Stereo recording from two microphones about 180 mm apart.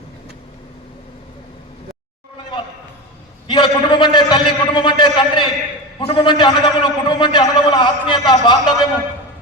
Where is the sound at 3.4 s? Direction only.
25° left (ahead or behind).